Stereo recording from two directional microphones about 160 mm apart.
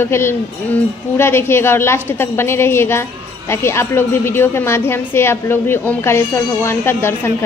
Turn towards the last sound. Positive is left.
turn(degrees=15)  # may be behind; listen again after turning